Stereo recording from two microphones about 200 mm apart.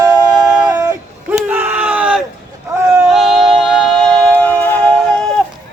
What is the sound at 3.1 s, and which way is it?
Music, centre (ahead or behind).